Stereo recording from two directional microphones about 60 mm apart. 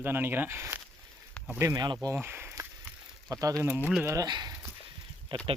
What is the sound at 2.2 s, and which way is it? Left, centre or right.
Speech, right.